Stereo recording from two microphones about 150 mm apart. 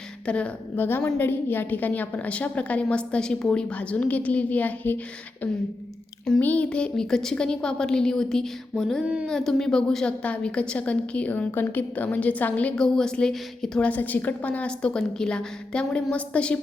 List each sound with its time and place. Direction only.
0.3 s a woman's voice: 10° left (ahead or behind)
6.2 s a woman's voice: 5° left (ahead or behind)